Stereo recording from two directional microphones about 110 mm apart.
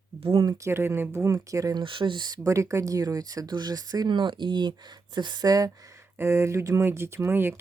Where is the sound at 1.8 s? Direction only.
50° right (ahead or behind).